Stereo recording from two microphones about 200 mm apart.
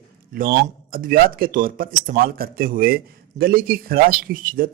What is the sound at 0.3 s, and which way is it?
A man's voice, 45° right (ahead or behind).